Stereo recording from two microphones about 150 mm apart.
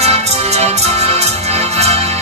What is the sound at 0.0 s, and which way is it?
Music, 45° right (ahead or behind).